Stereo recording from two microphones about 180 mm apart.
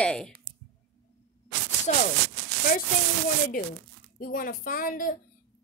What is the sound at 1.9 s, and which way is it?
Speech, 45° left (ahead or behind).